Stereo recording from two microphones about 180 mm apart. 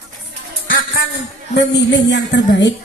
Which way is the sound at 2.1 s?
75° left (ahead or behind).